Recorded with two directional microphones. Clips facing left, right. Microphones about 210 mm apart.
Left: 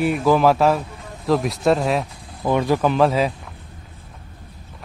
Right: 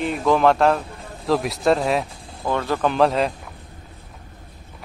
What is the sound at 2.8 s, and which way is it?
Speech, centre (ahead or behind).